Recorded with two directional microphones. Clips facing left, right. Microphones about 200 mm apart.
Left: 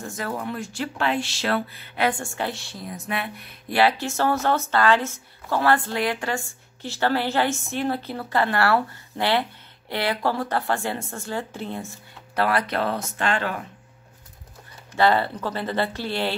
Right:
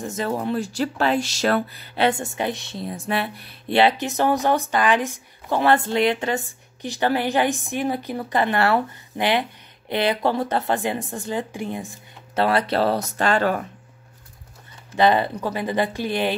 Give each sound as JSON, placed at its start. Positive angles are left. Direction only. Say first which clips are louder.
{"t": 0.0, "sound": "speech", "louder": "right 5 dB", "side_deg": -25}
{"t": 2.0, "sound": "a woman's voice", "louder": "right 3 dB", "side_deg": -20}
{"t": 12.4, "sound": "speech", "louder": "right 3 dB", "side_deg": -25}
{"t": 15.0, "sound": "a woman's voice", "louder": "right 2 dB", "side_deg": -15}